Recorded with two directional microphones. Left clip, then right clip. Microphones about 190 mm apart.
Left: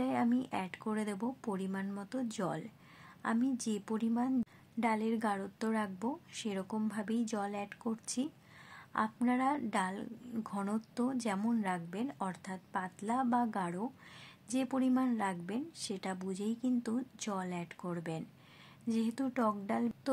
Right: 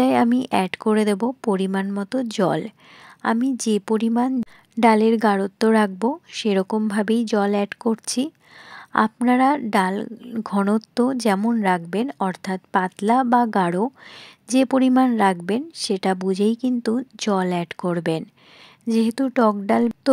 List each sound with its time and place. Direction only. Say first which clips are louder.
0.0 s a woman's voice: right 16 dB; 50° right (ahead or behind)
11.6 s a woman's voice: right 17 dB; 45° right (ahead or behind)